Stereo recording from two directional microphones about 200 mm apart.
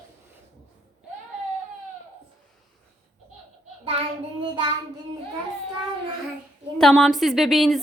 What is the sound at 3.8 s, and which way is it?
Child singing, 30° right (ahead or behind).